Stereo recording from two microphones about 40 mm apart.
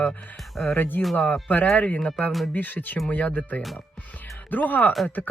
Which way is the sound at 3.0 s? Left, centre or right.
Left.